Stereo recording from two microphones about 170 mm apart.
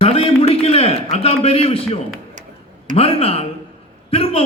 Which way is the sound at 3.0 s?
35° left (ahead or behind).